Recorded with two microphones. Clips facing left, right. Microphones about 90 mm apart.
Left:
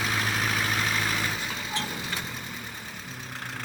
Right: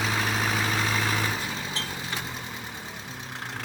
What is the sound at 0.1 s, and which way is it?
Vehicle, 25° right (ahead or behind).